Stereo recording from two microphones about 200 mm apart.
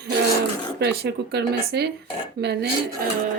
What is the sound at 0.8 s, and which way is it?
A woman's voice, 55° right (ahead or behind).